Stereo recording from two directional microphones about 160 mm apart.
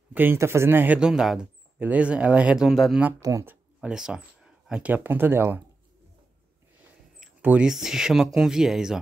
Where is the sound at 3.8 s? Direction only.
5° right (ahead or behind).